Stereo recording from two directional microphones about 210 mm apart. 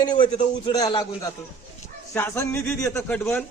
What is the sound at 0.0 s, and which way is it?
A man's voice, 20° left (ahead or behind).